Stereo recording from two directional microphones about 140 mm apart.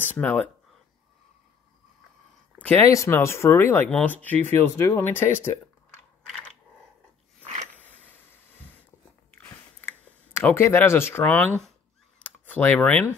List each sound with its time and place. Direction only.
0.0 s speech: 10° left (ahead or behind)
2.9 s speech: 20° left (ahead or behind)
8.0 s a sound: 15° left (ahead or behind)
9.8 s speech: 15° left (ahead or behind)
12.2 s computer keyboard: 10° left (ahead or behind)